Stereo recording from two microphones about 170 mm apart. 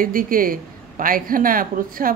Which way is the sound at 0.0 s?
55° right (ahead or behind).